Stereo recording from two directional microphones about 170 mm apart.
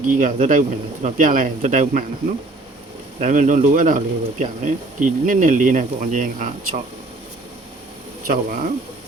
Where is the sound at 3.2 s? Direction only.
45° right (ahead or behind).